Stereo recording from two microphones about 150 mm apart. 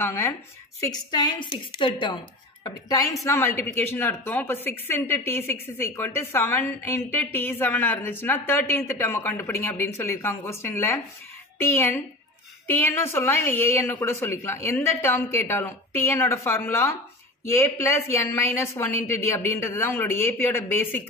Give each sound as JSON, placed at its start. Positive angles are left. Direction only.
{"t": 0.0, "sound": "a woman's voice", "side_deg": 15}